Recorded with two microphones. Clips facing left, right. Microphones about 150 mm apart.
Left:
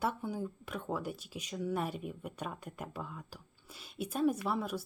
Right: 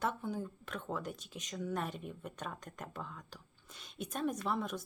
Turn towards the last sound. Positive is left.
turn(degrees=5)  # may be behind; listen again after turning